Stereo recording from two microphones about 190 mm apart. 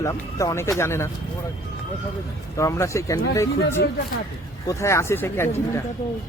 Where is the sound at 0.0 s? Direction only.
15° left (ahead or behind).